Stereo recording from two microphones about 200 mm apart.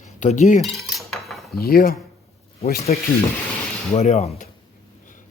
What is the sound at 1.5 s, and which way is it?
A man's voice, 50° left (ahead or behind).